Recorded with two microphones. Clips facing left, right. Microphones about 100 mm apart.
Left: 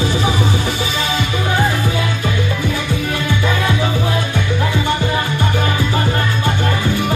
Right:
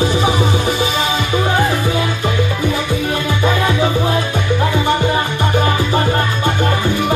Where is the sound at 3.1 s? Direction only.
30° right (ahead or behind).